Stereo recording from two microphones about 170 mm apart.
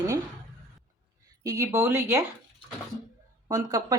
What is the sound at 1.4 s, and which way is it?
Speech, 20° right (ahead or behind).